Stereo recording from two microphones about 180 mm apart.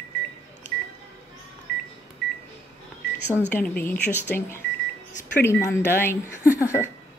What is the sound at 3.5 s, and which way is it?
Speech, 10° left (ahead or behind).